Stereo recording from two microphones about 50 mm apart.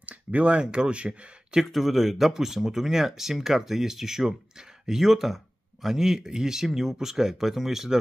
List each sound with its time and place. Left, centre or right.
0.0 s speech: right
1.6 s speech: centre